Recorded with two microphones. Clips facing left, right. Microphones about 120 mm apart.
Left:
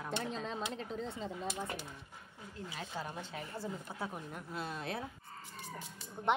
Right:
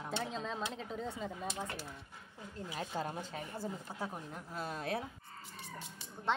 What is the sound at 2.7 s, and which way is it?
A woman's voice, 40° right (ahead or behind).